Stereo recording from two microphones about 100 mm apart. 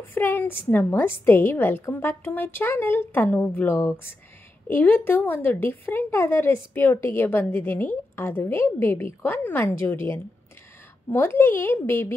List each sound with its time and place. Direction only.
0.1 s a woman's voice: 20° left (ahead or behind)
11.1 s a woman's voice: 20° left (ahead or behind)